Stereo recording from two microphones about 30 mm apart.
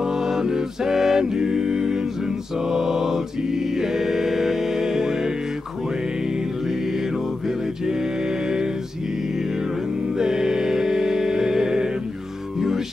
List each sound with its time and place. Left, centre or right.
0.0 s music: centre